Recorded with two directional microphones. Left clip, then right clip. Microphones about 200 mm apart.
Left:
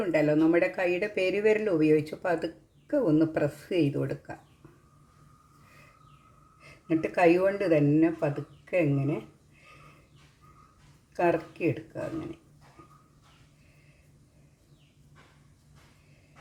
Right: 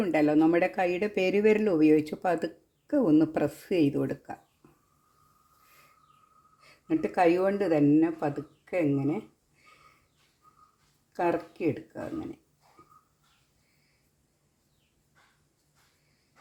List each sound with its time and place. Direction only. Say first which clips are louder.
0.0 s speech: even; 40° right (ahead or behind)
6.8 s speech: left 1 dB; 35° right (ahead or behind)
11.1 s speech: left 2 dB; 35° right (ahead or behind)